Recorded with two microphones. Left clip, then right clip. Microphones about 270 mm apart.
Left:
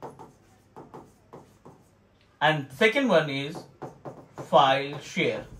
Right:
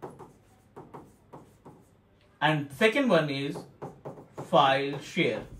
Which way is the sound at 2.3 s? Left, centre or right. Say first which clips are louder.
Left 3 dB; centre.